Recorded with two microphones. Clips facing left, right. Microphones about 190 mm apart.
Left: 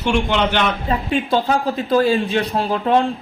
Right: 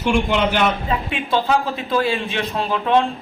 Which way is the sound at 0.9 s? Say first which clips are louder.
Left 3 dB; 40° left (ahead or behind).